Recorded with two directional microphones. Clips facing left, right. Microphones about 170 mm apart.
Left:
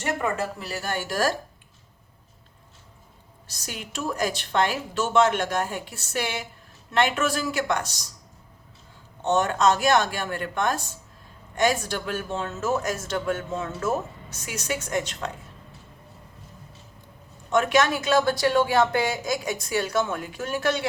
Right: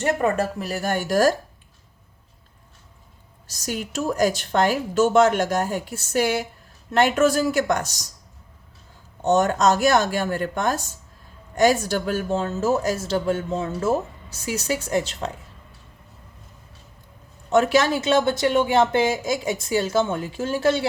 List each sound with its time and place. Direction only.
0.7 s speech: 45° right (ahead or behind)
3.7 s speech: 45° right (ahead or behind)
9.2 s speech: 40° right (ahead or behind)
17.5 s speech: 35° right (ahead or behind)